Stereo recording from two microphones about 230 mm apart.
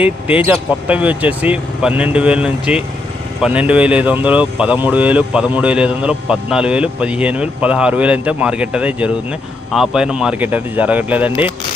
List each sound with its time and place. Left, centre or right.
0.0 s speech: centre